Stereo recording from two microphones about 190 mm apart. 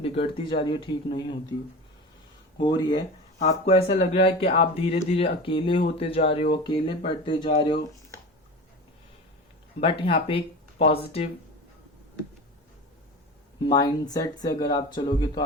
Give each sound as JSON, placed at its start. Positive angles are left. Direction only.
{"t": 0.0, "sound": "speech", "side_deg": 30}
{"t": 2.6, "sound": "speech", "side_deg": 25}
{"t": 2.9, "sound": "speech", "side_deg": 40}
{"t": 9.8, "sound": "speech", "side_deg": 30}
{"t": 13.6, "sound": "speech", "side_deg": 20}